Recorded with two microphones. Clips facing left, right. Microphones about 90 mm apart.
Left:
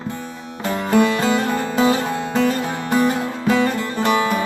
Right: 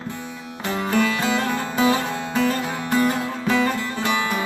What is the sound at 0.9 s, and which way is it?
Music, 20° left (ahead or behind).